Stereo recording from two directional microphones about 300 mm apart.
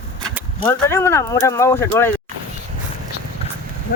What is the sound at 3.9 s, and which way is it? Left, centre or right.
Speech, left.